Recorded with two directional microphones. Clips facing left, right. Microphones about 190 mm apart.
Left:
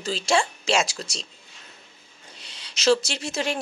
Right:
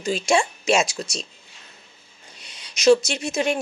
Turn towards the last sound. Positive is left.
turn(degrees=-20)  # may be behind; listen again after turning